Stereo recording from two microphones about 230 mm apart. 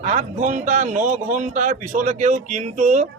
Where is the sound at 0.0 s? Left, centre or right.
Right.